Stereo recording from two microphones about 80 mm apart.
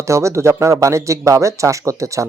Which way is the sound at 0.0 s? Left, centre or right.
Right.